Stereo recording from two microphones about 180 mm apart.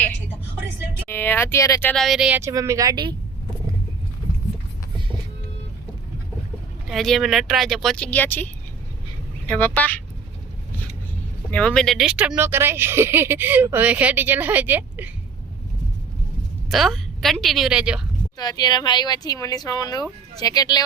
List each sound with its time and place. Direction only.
1.0 s speech: 10° left (ahead or behind)
1.9 s speech: centre (ahead or behind)
2.4 s speech: 15° right (ahead or behind)
6.8 s speech: centre (ahead or behind)
9.5 s speech: 10° left (ahead or behind)
11.5 s speech: 5° left (ahead or behind)
16.6 s speech: centre (ahead or behind)
18.3 s speech: 25° left (ahead or behind)